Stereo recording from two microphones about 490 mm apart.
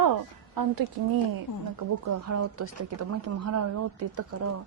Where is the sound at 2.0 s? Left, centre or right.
Right.